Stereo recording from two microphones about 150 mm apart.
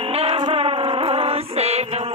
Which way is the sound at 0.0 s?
40° right (ahead or behind).